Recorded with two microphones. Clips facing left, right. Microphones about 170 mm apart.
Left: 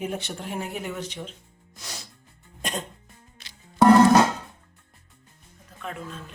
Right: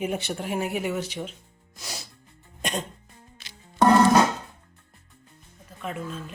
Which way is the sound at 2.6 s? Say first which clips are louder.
Right 2 dB; centre (ahead or behind).